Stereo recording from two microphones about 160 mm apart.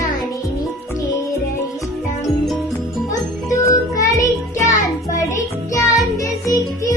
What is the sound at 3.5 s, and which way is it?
Music, 20° left (ahead or behind).